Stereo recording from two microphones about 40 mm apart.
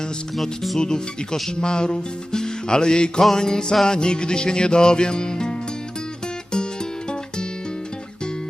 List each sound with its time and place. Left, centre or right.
0.8 s speech: centre
3.3 s music: centre
3.8 s speech: centre